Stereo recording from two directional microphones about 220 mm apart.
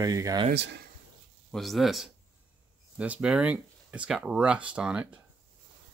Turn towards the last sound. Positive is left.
turn(degrees=-5)  # may be behind; listen again after turning